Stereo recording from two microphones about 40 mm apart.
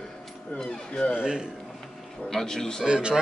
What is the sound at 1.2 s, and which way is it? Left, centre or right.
Cough, centre.